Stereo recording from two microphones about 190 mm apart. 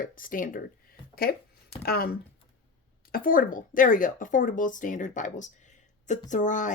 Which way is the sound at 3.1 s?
45° left (ahead or behind).